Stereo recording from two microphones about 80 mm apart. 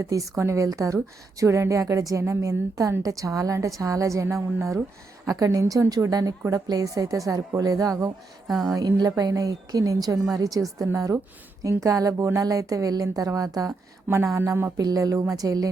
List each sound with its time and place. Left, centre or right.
0.0 s speech: right
8.4 s speech: centre
9.0 s speech: right
14.3 s speech: right
14.8 s speech: right